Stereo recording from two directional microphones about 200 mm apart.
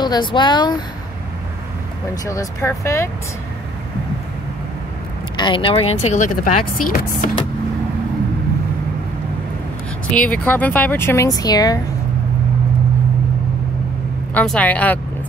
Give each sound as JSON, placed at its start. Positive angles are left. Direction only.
{"t": 0.0, "sound": "speech", "side_deg": 20}
{"t": 2.2, "sound": "speech", "side_deg": 15}
{"t": 5.4, "sound": "speech", "side_deg": 25}
{"t": 10.1, "sound": "speech", "side_deg": 5}
{"t": 14.3, "sound": "speech", "side_deg": 5}